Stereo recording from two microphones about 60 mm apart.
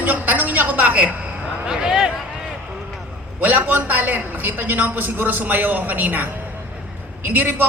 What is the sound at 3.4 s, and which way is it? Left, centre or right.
A man's voice, right.